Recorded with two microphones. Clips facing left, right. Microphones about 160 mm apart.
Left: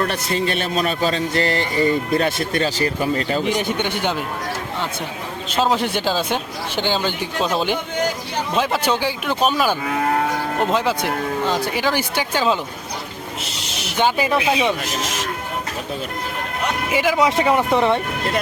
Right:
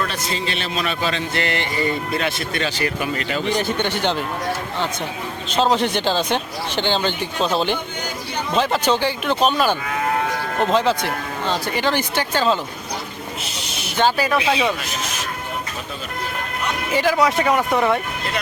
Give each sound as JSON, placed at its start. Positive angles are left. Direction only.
{"t": 0.1, "sound": "a man's voice", "side_deg": 55}
{"t": 3.4, "sound": "speech", "side_deg": 15}
{"t": 5.5, "sound": "speech", "side_deg": 5}
{"t": 13.9, "sound": "speech", "side_deg": 15}
{"t": 16.9, "sound": "speech", "side_deg": 10}
{"t": 17.2, "sound": "speech", "side_deg": 25}